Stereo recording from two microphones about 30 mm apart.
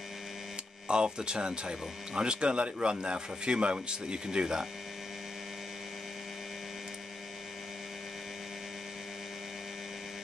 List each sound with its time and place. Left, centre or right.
0.8 s speech: right